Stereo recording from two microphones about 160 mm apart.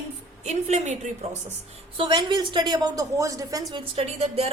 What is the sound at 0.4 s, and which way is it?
Speech, 45° right (ahead or behind).